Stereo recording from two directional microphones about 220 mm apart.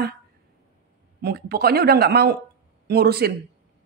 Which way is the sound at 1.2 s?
45° right (ahead or behind).